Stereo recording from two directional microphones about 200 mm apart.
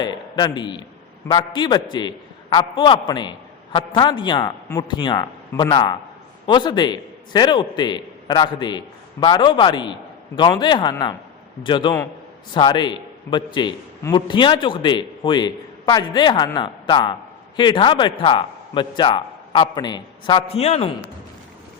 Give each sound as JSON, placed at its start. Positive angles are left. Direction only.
{"t": 0.0, "sound": "a man's voice", "side_deg": 20}